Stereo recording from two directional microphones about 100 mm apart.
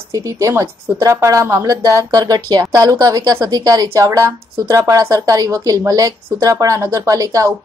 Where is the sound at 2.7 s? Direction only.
35° right (ahead or behind).